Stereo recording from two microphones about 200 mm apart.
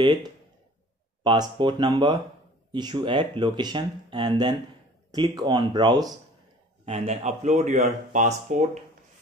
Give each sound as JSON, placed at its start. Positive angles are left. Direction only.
{"t": 0.0, "sound": "speech", "side_deg": -20}
{"t": 6.9, "sound": "speech", "side_deg": -30}